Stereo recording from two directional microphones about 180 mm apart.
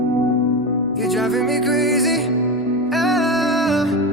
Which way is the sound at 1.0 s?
Centre (ahead or behind).